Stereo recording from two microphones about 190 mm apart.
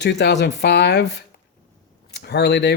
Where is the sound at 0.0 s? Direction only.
65° left (ahead or behind).